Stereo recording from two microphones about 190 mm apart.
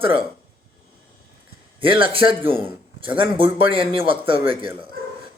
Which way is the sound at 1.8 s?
25° right (ahead or behind).